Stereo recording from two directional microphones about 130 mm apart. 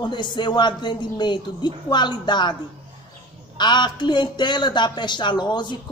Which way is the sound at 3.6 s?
35° left (ahead or behind).